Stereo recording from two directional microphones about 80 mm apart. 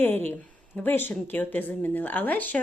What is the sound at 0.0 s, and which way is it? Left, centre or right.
Speech, left.